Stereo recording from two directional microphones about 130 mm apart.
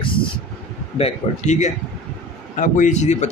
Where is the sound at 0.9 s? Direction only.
55° left (ahead or behind).